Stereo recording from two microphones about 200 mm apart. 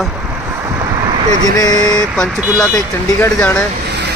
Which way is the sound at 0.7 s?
15° right (ahead or behind).